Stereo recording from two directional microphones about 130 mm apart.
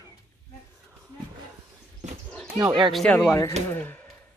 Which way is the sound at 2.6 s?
40° right (ahead or behind).